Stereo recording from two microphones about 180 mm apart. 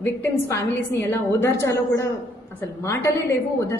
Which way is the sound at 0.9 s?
15° left (ahead or behind).